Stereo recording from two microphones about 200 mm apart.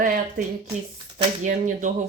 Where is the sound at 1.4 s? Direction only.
40° right (ahead or behind).